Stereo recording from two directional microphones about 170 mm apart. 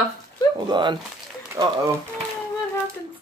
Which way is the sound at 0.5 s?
25° right (ahead or behind).